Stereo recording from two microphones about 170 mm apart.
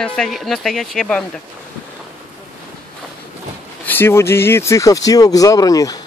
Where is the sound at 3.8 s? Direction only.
10° left (ahead or behind).